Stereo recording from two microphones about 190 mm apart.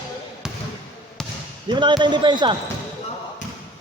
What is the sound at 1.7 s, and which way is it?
Speech, 25° right (ahead or behind).